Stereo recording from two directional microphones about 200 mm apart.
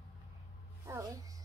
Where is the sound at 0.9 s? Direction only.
15° right (ahead or behind).